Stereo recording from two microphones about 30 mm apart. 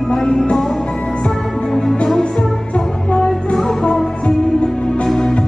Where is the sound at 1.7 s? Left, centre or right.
Centre.